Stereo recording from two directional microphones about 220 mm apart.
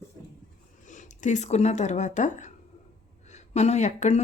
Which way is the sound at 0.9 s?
35° left (ahead or behind).